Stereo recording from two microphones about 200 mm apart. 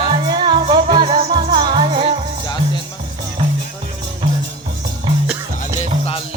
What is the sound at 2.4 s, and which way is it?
Music, 20° left (ahead or behind).